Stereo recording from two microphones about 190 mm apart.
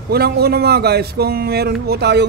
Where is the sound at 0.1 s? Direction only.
55° right (ahead or behind).